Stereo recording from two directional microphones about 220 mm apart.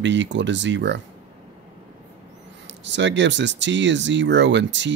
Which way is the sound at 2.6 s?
55° right (ahead or behind).